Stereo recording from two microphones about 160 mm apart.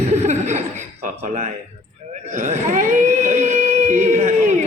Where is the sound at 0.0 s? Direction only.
45° right (ahead or behind).